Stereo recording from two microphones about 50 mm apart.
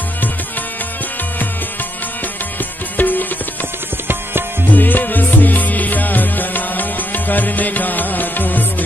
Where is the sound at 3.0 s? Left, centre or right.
Left.